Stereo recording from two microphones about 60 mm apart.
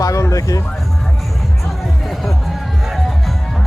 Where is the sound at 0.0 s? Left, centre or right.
Left.